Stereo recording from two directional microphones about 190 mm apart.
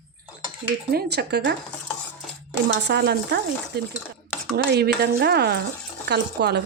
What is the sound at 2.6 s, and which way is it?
Speech, 60° right (ahead or behind).